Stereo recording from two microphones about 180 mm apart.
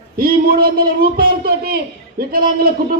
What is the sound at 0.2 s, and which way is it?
A man's voice, 55° right (ahead or behind).